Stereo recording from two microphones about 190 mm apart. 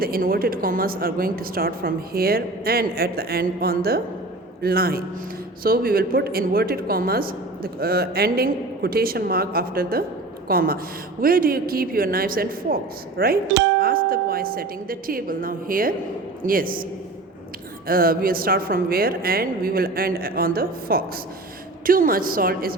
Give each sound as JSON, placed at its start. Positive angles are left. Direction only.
{"t": 0.0, "sound": "speech", "side_deg": -50}
{"t": 17.8, "sound": "speech", "side_deg": -50}